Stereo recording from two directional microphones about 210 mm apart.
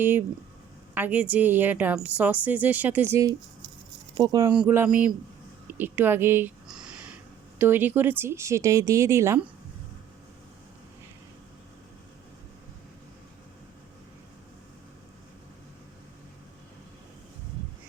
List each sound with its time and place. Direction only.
0.0 s a woman's voice: 10° right (ahead or behind)
4.4 s a woman's voice: 5° right (ahead or behind)